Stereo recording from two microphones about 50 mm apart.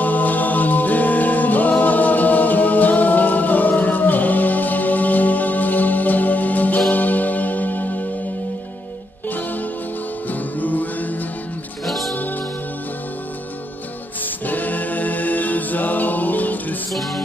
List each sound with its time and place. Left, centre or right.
0.0 s music: left
10.6 s music: left
11.8 s music: centre
14.4 s a capella: left